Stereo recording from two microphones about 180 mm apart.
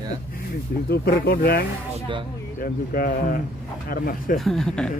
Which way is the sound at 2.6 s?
55° left (ahead or behind).